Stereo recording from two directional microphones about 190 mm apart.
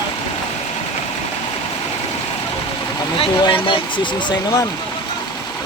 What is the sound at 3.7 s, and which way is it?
Speech, 25° left (ahead or behind).